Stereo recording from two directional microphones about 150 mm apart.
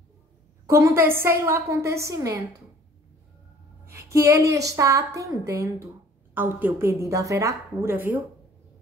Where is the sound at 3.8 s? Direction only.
20° right (ahead or behind).